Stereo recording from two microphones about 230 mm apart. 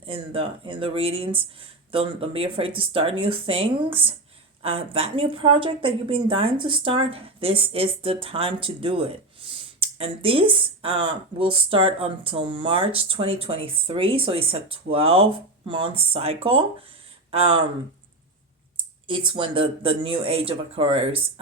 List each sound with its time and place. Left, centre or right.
0.0 s a woman's voice: right
19.0 s a woman's voice: right